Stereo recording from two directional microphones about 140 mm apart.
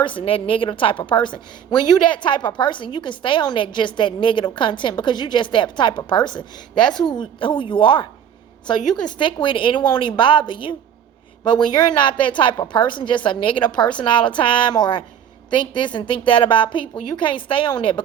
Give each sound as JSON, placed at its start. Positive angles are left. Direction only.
{"t": 0.0, "sound": "a woman's voice", "side_deg": 40}
{"t": 9.1, "sound": "a woman's voice", "side_deg": 35}